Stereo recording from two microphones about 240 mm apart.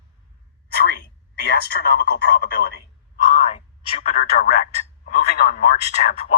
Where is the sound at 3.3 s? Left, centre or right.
Left.